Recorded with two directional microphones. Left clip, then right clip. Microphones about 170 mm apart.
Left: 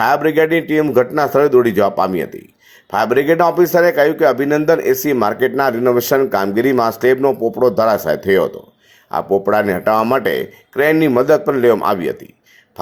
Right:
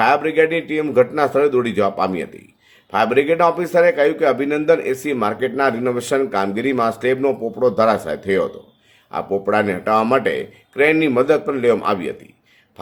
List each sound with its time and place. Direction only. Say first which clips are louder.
0.0 s a man's voice: left 2 dB; 35° left (ahead or behind)